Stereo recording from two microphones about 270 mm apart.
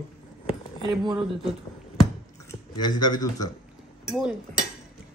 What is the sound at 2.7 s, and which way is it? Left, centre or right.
Speech, centre.